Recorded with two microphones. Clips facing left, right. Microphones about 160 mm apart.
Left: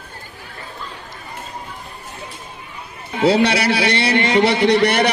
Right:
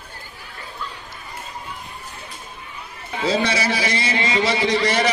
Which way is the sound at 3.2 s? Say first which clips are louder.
Left 6 dB; 70° left (ahead or behind).